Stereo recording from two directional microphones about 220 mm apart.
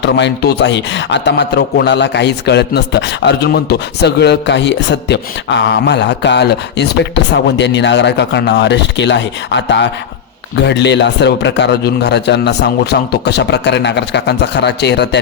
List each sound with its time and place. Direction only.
0.0 s speech: 55° left (ahead or behind)